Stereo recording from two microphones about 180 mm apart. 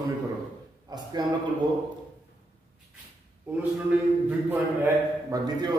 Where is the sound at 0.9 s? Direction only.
25° right (ahead or behind).